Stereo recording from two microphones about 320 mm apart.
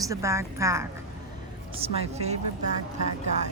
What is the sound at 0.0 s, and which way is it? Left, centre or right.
Speech, centre.